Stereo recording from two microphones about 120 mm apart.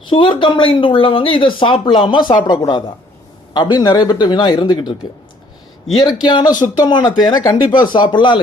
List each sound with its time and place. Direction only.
0.0 s speech: 45° left (ahead or behind)
6.2 s speech: 35° left (ahead or behind)